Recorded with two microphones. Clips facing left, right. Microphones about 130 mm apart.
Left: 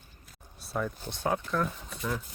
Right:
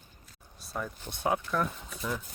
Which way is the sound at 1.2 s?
10° right (ahead or behind).